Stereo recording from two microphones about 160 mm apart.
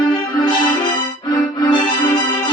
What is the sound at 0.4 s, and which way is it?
Music, 25° left (ahead or behind).